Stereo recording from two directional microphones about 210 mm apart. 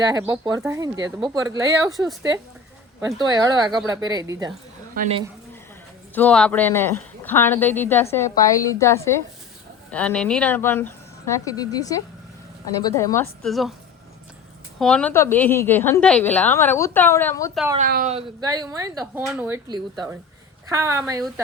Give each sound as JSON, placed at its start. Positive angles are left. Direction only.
{"t": 0.0, "sound": "speech", "side_deg": -15}
{"t": 1.9, "sound": "speech", "side_deg": 0}
{"t": 3.2, "sound": "a woman's voice", "side_deg": -15}
{"t": 4.9, "sound": "speech", "side_deg": -30}
{"t": 6.1, "sound": "a woman's voice", "side_deg": 5}
{"t": 13.4, "sound": "speech", "side_deg": 0}
{"t": 14.8, "sound": "a woman's voice", "side_deg": 5}
{"t": 17.7, "sound": "speech", "side_deg": -40}
{"t": 18.1, "sound": "speech", "side_deg": -25}